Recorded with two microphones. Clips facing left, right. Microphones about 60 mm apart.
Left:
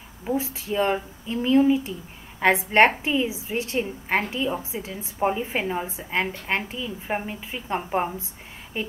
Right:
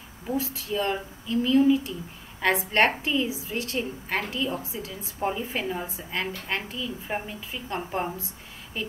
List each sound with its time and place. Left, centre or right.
0.3 s a woman's voice: left